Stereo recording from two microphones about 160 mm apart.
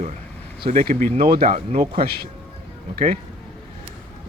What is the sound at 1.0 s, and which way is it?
Speech, 65° right (ahead or behind).